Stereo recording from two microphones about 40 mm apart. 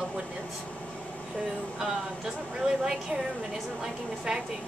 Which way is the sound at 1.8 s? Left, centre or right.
Centre.